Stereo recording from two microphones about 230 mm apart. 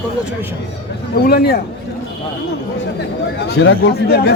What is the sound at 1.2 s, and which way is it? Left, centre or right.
Speech, left.